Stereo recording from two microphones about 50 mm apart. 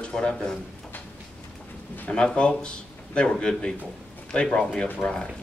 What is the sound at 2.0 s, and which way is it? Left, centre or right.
A man's voice, centre.